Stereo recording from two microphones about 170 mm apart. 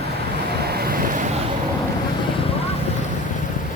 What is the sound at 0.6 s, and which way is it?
Vehicle, 65° right (ahead or behind).